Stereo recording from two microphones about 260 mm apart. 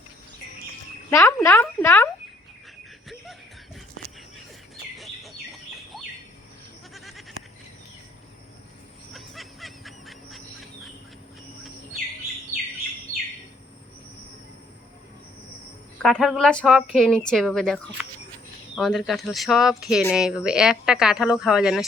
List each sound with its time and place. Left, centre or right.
1.1 s speech: centre
4.9 s bird: centre
6.9 s goat: centre
9.1 s a sound: centre
16.0 s a woman's voice: centre